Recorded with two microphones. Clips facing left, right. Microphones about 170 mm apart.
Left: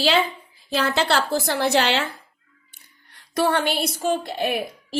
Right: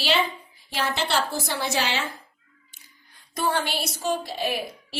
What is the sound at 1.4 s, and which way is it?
Speech, 65° left (ahead or behind).